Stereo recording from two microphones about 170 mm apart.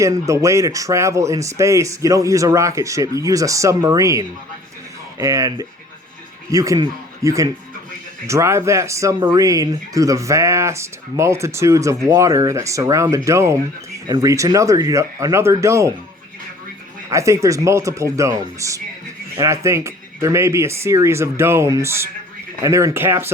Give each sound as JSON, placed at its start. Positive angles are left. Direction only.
{"t": 0.0, "sound": "a man's voice", "side_deg": -20}
{"t": 17.1, "sound": "speech", "side_deg": -20}